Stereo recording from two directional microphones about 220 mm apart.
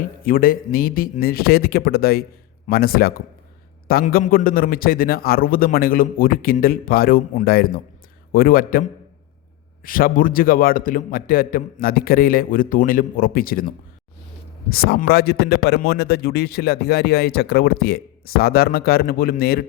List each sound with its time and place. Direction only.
0.3 s a man's voice: 40° left (ahead or behind)